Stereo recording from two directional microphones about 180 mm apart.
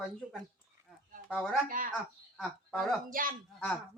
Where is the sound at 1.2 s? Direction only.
Centre (ahead or behind).